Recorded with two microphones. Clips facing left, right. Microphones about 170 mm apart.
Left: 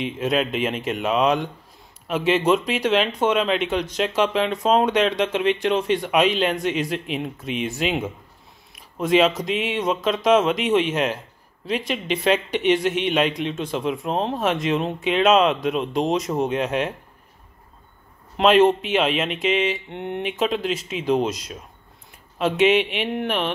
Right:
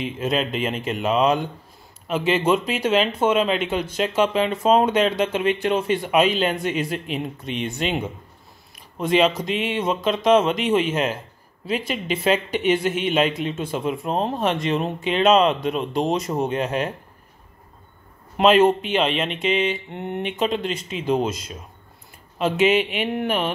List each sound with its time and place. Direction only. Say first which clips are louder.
0.0 s speech: left 1 dB; centre (ahead or behind)
18.4 s speech: even; centre (ahead or behind)